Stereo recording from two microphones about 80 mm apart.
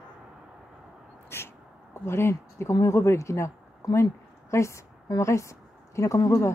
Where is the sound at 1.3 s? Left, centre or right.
Left.